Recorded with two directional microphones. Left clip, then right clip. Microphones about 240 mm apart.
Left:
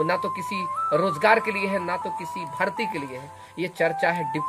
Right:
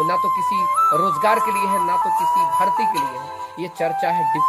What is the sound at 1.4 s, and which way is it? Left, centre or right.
Speech, right.